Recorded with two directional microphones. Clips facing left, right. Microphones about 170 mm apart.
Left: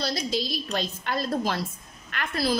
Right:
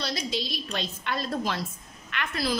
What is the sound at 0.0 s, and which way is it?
A woman's voice, 40° left (ahead or behind).